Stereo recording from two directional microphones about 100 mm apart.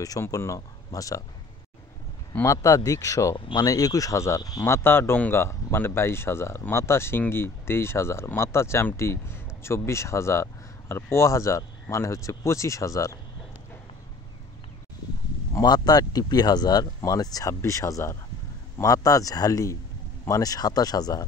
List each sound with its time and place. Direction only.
0.2 s speech: 30° left (ahead or behind)
2.4 s speech: 35° left (ahead or behind)
4.6 s speech: 25° left (ahead or behind)
15.6 s speech: 45° left (ahead or behind)